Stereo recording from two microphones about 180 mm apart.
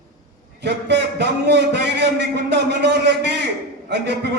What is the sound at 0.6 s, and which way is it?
A man's voice, 70° right (ahead or behind).